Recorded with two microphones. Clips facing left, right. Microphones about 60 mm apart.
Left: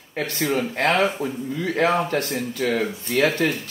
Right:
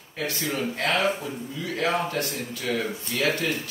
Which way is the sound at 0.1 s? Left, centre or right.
Left.